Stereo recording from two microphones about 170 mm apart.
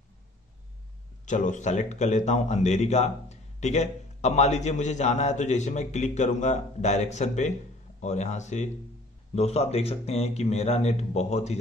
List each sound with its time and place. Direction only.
1.2 s a man's voice: 45° left (ahead or behind)